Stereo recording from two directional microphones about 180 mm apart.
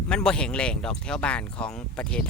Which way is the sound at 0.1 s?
5° left (ahead or behind).